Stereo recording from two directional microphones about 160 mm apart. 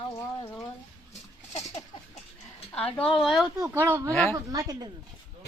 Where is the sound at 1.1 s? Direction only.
45° left (ahead or behind).